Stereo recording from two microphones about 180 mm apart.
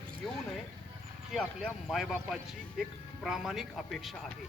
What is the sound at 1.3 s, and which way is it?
Speech, centre (ahead or behind).